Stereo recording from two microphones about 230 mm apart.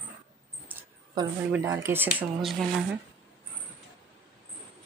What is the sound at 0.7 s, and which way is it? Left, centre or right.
Speech, centre.